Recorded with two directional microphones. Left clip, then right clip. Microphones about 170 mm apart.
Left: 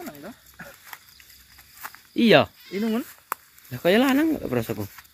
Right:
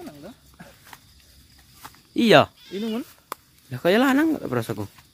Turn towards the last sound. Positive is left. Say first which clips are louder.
# even
turn(degrees=-10)  # may be behind; listen again after turning